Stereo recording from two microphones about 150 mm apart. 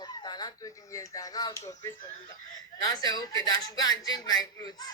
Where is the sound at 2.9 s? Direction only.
25° left (ahead or behind).